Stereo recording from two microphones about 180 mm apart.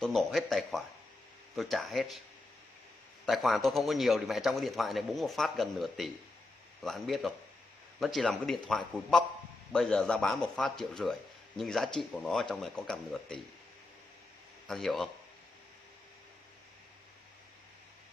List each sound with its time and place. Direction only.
0.0 s a man's voice: centre (ahead or behind)
3.3 s a man's voice: centre (ahead or behind)
14.7 s a man's voice: centre (ahead or behind)